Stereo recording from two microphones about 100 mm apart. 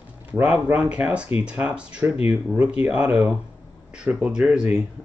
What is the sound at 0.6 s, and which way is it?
Speech, 15° right (ahead or behind).